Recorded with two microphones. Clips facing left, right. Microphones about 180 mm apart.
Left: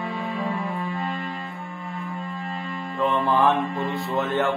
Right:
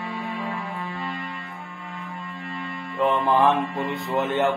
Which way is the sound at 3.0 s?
20° right (ahead or behind).